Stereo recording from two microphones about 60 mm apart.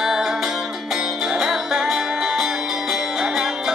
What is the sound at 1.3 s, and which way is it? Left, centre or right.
Music, centre.